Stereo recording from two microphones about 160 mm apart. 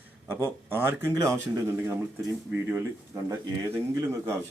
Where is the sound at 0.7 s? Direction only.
15° right (ahead or behind).